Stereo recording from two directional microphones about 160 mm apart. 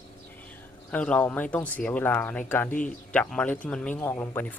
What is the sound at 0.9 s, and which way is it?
Speech, 10° left (ahead or behind).